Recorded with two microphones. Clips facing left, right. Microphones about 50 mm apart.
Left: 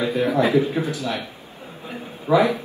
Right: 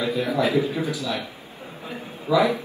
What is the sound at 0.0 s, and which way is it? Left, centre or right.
Speech, left.